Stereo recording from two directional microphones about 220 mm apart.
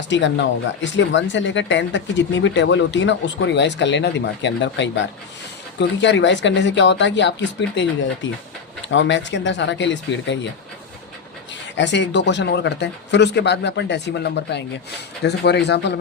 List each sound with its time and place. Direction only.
0.1 s speech: 55° left (ahead or behind)
6.0 s speech: 55° left (ahead or behind)
11.8 s speech: 55° left (ahead or behind)